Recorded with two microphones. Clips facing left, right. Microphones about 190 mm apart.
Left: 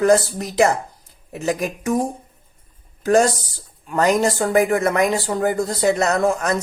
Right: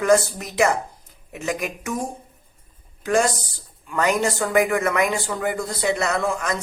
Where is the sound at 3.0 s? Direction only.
40° left (ahead or behind).